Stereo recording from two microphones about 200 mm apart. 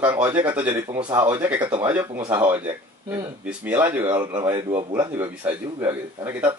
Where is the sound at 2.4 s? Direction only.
10° right (ahead or behind).